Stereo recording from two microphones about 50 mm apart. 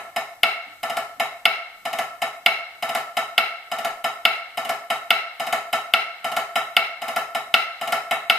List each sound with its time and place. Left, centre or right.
0.1 s wood block: centre